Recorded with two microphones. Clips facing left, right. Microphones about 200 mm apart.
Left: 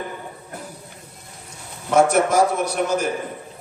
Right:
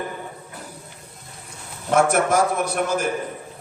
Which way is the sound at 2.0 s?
55° right (ahead or behind).